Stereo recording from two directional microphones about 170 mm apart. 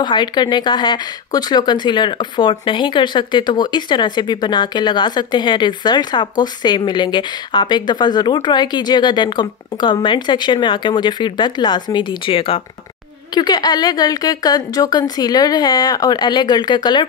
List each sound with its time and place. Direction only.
0.0 s speech: 25° left (ahead or behind)